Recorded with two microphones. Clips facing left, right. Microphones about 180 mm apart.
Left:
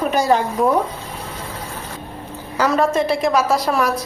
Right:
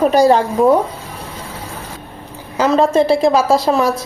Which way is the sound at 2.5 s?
20° right (ahead or behind).